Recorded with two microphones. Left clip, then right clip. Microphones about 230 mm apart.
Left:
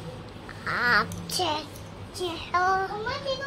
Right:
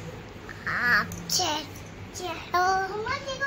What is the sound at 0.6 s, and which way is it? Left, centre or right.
Duck, left.